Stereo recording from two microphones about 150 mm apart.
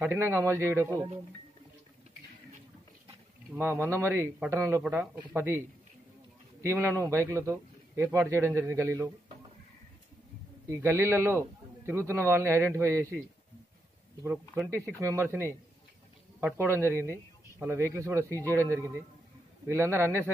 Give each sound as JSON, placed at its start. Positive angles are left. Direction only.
{"t": 0.0, "sound": "speech", "side_deg": -15}
{"t": 3.5, "sound": "speech", "side_deg": -15}
{"t": 6.6, "sound": "speech", "side_deg": -15}
{"t": 10.7, "sound": "speech", "side_deg": -15}
{"t": 14.2, "sound": "speech", "side_deg": -15}
{"t": 19.7, "sound": "speech", "side_deg": -15}